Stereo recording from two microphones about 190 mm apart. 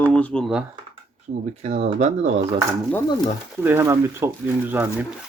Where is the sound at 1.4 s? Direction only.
35° right (ahead or behind).